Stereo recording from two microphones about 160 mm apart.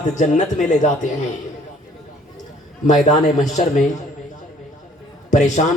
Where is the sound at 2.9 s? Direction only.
50° left (ahead or behind).